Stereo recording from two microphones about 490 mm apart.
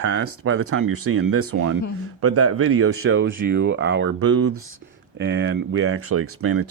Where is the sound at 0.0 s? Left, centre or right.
Right.